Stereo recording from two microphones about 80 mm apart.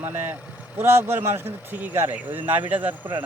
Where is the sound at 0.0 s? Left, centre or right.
Right.